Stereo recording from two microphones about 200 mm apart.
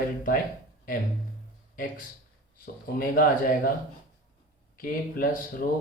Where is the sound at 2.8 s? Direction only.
45° left (ahead or behind).